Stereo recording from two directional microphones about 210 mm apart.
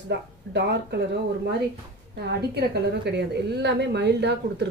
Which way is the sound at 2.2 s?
50° right (ahead or behind).